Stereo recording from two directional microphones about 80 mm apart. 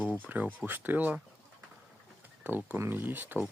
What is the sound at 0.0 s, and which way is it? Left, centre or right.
Speech, centre.